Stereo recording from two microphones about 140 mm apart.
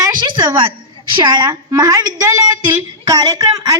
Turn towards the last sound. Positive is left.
turn(degrees=-25)  # may be behind; listen again after turning